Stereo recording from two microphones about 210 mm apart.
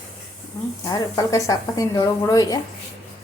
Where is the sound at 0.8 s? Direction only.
15° left (ahead or behind).